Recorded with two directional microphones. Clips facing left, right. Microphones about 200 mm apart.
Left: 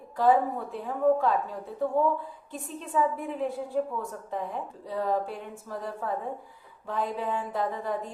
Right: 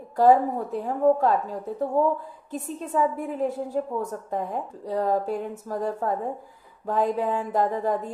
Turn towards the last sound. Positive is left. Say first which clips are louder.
# right 6 dB
turn(degrees=-45)  # may be behind; listen again after turning